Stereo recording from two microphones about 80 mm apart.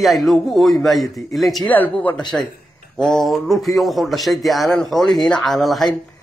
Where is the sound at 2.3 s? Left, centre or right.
Centre.